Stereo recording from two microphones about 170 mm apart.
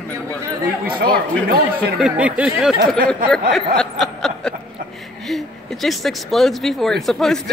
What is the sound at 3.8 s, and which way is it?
Snicker, 5° left (ahead or behind).